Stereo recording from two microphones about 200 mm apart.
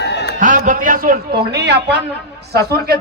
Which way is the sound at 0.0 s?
60° left (ahead or behind).